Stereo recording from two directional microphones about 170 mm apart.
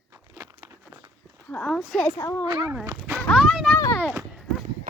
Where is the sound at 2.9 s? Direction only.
15° right (ahead or behind).